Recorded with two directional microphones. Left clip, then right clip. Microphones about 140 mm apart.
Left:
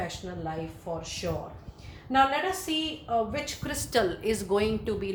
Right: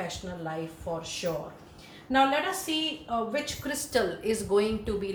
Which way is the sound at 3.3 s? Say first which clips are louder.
Right 2 dB; 60° left (ahead or behind).